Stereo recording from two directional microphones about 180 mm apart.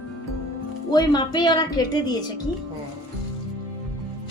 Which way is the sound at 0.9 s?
25° left (ahead or behind).